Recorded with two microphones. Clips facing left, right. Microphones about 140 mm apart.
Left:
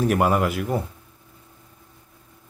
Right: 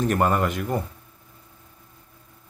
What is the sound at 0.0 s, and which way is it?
Speech, 10° left (ahead or behind).